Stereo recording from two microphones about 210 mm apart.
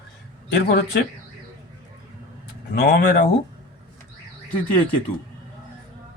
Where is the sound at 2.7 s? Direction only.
45° left (ahead or behind).